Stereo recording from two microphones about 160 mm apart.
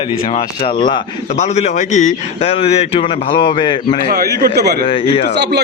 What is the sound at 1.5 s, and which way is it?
A man's voice, 45° left (ahead or behind).